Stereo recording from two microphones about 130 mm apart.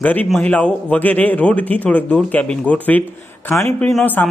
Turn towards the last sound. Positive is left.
turn(degrees=5)  # may be behind; listen again after turning